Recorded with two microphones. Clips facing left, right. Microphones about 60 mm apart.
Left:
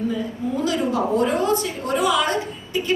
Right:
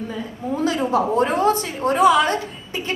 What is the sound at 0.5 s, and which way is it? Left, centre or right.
A woman's voice, right.